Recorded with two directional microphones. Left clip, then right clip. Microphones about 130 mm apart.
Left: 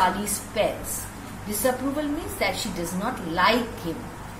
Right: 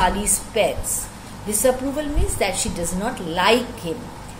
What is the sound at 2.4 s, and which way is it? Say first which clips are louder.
Speech: right 3 dB; 90° right.